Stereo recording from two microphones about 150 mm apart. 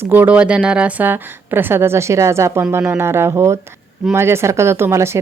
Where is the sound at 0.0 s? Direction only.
10° right (ahead or behind).